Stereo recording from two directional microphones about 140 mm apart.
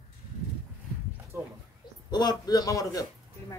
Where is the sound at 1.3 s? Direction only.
15° right (ahead or behind).